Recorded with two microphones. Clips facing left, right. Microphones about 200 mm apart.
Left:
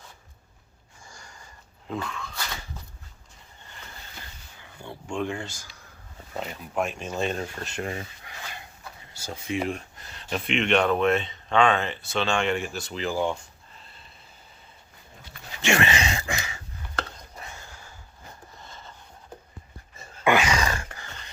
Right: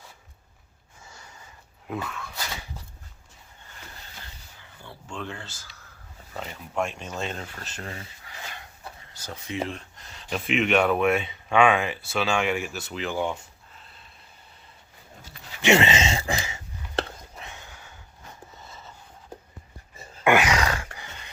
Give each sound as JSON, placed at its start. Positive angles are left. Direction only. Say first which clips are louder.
{"t": 1.0, "sound": "sniff", "louder": "even", "side_deg": -5}
{"t": 1.9, "sound": "speech", "louder": "even", "side_deg": -5}
{"t": 5.0, "sound": "speech", "louder": "left 7 dB", "side_deg": 10}
{"t": 6.7, "sound": "speech", "louder": "left 2 dB", "side_deg": 5}
{"t": 9.1, "sound": "speech", "louder": "left 4 dB", "side_deg": 10}
{"t": 10.1, "sound": "speech", "louder": "right 1 dB", "side_deg": 0}
{"t": 15.6, "sound": "a sound", "louder": "right 4 dB", "side_deg": -20}
{"t": 17.4, "sound": "a sound", "louder": "left 2 dB", "side_deg": 0}
{"t": 20.2, "sound": "a sound", "louder": "right 1 dB", "side_deg": -15}